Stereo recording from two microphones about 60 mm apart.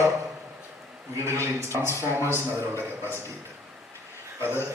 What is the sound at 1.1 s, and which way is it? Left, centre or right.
A man's voice, right.